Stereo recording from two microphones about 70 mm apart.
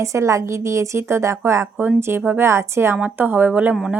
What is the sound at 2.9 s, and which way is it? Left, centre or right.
Speech, right.